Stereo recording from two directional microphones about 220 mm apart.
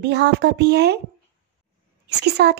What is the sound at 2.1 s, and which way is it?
Speech, 50° right (ahead or behind).